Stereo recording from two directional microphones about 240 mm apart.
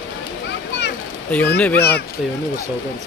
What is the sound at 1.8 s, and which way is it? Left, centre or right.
Speech, left.